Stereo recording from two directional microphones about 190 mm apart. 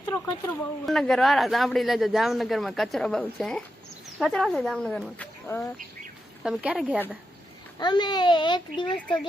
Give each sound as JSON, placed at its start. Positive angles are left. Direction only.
{"t": 0.0, "sound": "speech", "side_deg": 10}
{"t": 6.4, "sound": "speech", "side_deg": -5}
{"t": 7.8, "sound": "a child's voice", "side_deg": 20}
{"t": 9.0, "sound": "speech", "side_deg": 5}